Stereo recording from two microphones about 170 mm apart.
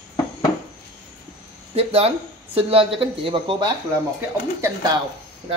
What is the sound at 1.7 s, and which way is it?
Speech, 35° right (ahead or behind).